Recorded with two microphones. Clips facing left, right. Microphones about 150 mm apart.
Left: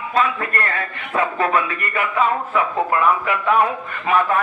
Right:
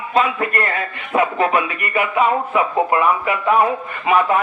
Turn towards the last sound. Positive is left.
turn(degrees=-15)  # may be behind; listen again after turning